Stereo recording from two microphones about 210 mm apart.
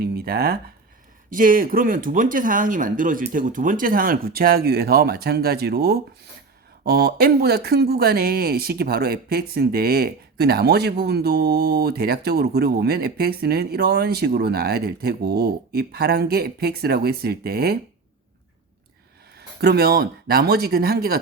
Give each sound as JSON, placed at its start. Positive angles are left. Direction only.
{"t": 0.0, "sound": "speech", "side_deg": -45}
{"t": 19.4, "sound": "speech", "side_deg": -50}